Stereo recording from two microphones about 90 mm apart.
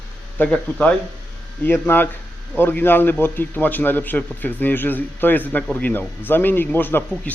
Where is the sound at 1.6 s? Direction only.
20° left (ahead or behind).